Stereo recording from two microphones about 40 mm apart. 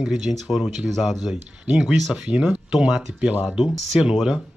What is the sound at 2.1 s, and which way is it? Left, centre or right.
A man's voice, right.